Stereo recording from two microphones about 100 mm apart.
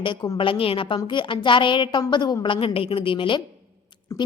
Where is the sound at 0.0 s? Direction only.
55° left (ahead or behind).